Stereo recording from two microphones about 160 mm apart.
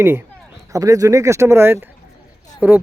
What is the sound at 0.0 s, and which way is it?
Speech, 15° right (ahead or behind).